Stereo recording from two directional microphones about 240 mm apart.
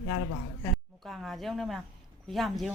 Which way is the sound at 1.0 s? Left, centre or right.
Centre.